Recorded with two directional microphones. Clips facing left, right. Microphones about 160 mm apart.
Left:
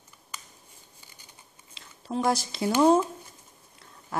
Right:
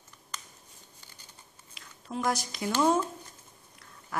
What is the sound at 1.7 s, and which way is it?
Speech, 30° left (ahead or behind).